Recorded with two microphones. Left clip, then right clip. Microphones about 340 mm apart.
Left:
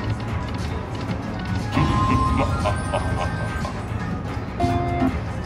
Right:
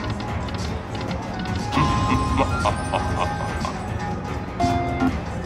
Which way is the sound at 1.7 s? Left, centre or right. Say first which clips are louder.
Even; centre.